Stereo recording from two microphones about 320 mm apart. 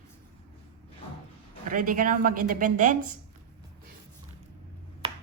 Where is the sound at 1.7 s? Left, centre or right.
Right.